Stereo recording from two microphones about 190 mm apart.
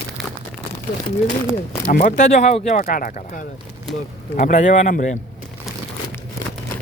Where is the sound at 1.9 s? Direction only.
45° left (ahead or behind).